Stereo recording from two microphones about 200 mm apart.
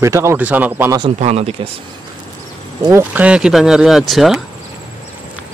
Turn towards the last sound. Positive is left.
turn(degrees=0)  # may be behind; listen again after turning